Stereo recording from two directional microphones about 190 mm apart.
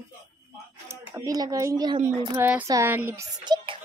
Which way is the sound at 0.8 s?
15° right (ahead or behind).